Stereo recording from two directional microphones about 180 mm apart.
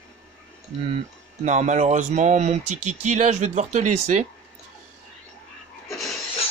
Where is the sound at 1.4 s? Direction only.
40° right (ahead or behind).